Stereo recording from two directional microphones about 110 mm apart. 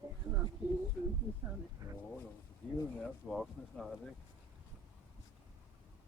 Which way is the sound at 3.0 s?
5° left (ahead or behind).